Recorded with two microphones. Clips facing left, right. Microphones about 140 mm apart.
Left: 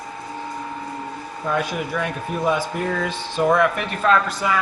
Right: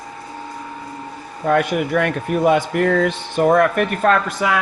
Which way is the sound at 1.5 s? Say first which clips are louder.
Right 7 dB; 60° right (ahead or behind).